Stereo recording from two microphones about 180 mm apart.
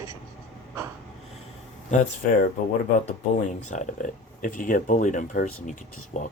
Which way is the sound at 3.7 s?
45° left (ahead or behind).